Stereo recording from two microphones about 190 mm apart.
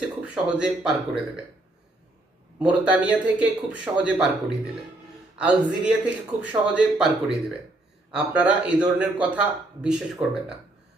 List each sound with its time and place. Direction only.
0.2 s speech: 5° right (ahead or behind)
2.6 s a man's voice: 5° right (ahead or behind)
10.2 s speech: 30° right (ahead or behind)